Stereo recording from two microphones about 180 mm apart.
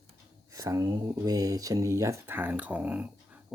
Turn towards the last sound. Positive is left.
turn(degrees=-10)  # may be behind; listen again after turning